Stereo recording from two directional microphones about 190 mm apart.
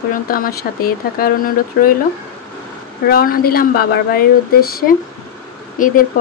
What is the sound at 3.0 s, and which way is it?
Speech, 50° left (ahead or behind).